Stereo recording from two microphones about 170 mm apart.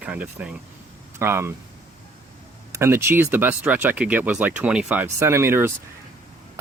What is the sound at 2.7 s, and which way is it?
Speech, 15° right (ahead or behind).